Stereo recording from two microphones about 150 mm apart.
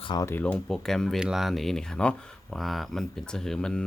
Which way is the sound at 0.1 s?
25° left (ahead or behind).